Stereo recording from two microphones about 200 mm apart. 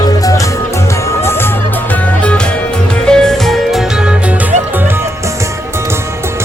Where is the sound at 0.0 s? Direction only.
15° left (ahead or behind).